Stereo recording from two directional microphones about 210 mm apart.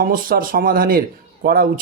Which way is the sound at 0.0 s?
40° right (ahead or behind).